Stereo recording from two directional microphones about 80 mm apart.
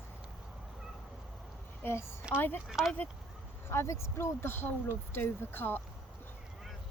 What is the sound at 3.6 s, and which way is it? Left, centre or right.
Speech, left.